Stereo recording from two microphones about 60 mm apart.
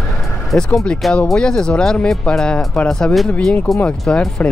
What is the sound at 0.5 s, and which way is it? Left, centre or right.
Speech, centre.